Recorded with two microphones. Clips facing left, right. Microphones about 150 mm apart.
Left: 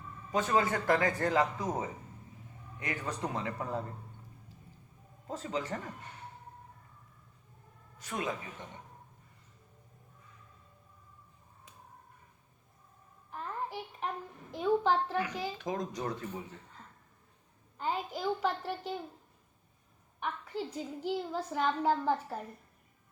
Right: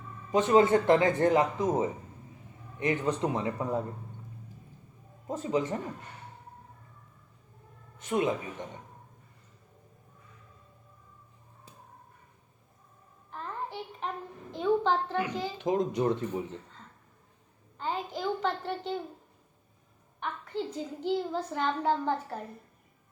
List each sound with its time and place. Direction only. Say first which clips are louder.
0.3 s speech: right 7 dB; 20° right (ahead or behind)
5.3 s speech: right 6 dB; 20° right (ahead or behind)
7.9 s speech: right 8 dB; 25° right (ahead or behind)
13.3 s a sound: right 1 dB; 5° left (ahead or behind)
14.5 s a child's voice: right 2 dB; 5° left (ahead or behind)
15.5 s speech: right 8 dB; 25° right (ahead or behind)
17.7 s a child's voice: right 1 dB; 10° left (ahead or behind)
20.1 s a child's voice: right 2 dB; 5° left (ahead or behind)